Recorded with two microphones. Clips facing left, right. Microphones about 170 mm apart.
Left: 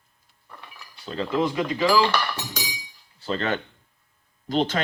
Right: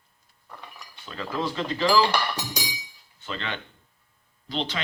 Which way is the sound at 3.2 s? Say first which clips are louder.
Left 8 dB; 40° left (ahead or behind).